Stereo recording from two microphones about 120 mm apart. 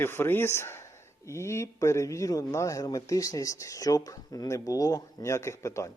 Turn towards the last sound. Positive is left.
turn(degrees=25)  # may be behind; listen again after turning